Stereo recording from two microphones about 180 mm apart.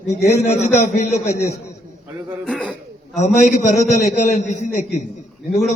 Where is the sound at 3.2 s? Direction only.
40° left (ahead or behind).